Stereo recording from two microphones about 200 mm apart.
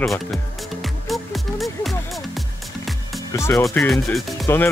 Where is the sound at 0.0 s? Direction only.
Centre (ahead or behind).